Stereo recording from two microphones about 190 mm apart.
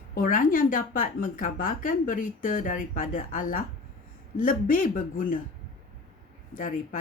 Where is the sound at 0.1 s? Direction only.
45° left (ahead or behind).